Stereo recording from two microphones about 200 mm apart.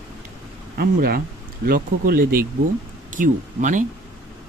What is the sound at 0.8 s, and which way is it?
Speech, 50° right (ahead or behind).